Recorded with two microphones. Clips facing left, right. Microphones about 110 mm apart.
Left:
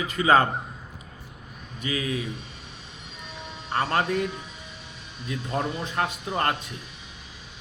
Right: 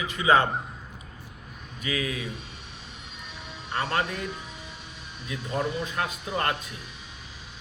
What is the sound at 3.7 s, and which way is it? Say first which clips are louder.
Speech: left 3 dB; 35° left (ahead or behind).